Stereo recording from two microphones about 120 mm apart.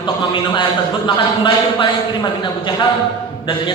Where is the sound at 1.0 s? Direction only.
40° left (ahead or behind).